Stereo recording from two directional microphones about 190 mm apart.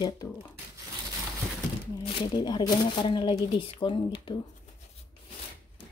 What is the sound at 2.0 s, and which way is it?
Speech, 25° left (ahead or behind).